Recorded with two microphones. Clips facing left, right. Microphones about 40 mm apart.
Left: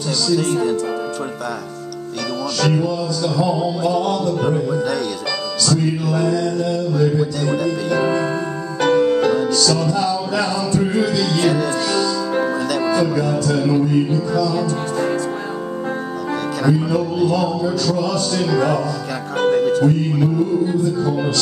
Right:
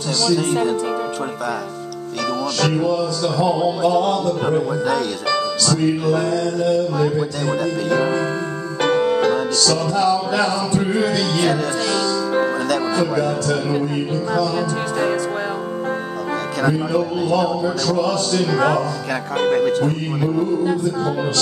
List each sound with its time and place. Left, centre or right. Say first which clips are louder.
2.6 s a man's voice: even; centre
5.7 s music: right 1 dB; centre
7.1 s a man's voice: left 2 dB; centre
8.9 s music: left 3 dB; right
9.2 s music: left 1 dB; centre
11.0 s a man's voice: left 1 dB; centre
12.4 s music: right 1 dB; centre
16.6 s a man's voice: left 1 dB; centre
19.5 s speech: left 1 dB; right